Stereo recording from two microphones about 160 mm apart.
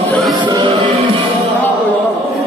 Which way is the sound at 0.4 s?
30° right (ahead or behind).